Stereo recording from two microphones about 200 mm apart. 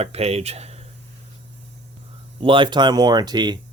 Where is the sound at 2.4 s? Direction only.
25° right (ahead or behind).